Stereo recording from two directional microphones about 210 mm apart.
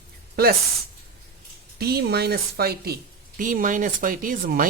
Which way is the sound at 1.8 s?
50° right (ahead or behind).